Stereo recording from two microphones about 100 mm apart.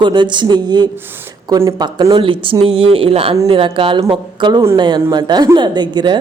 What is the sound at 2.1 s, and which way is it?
Speech, 60° right (ahead or behind).